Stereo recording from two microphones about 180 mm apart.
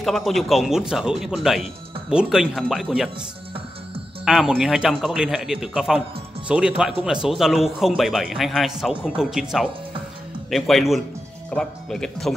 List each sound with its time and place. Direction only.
0.0 s a man's voice: centre (ahead or behind)
4.2 s a man's voice: centre (ahead or behind)